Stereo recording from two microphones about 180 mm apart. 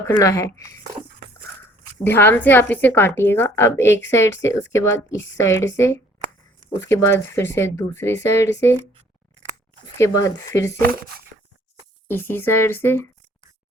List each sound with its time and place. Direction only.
0.2 s a woman's voice: 20° left (ahead or behind)
2.0 s a woman's voice: 10° left (ahead or behind)
10.0 s a woman's voice: 15° left (ahead or behind)
12.0 s a woman's voice: 10° left (ahead or behind)